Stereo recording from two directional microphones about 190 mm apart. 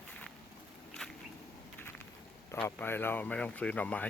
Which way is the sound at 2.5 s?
10° left (ahead or behind).